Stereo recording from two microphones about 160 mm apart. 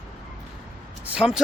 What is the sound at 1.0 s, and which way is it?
Speech, 5° right (ahead or behind).